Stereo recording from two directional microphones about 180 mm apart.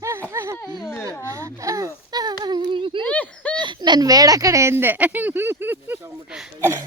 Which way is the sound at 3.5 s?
25° right (ahead or behind).